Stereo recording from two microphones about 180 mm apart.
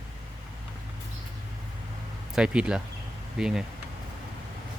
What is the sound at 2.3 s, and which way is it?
Speech, 5° right (ahead or behind).